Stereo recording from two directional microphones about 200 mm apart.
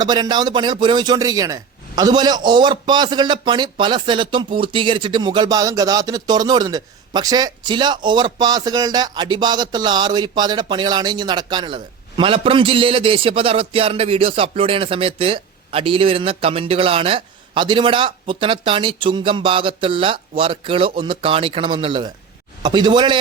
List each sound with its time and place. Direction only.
0.0 s a man's voice: 20° right (ahead or behind)